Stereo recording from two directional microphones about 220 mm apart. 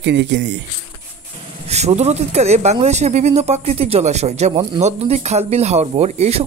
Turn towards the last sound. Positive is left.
turn(degrees=-30)  # may be behind; listen again after turning